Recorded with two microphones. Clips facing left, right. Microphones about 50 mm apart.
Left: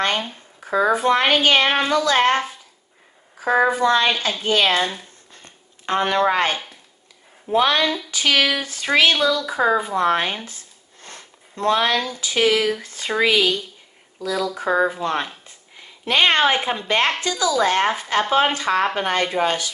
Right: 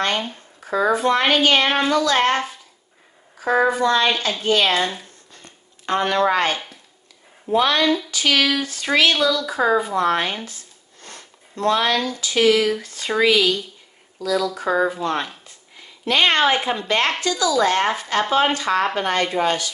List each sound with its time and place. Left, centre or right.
0.2 s a child's voice: centre
5.3 s a sound: left
7.5 s a child's voice: left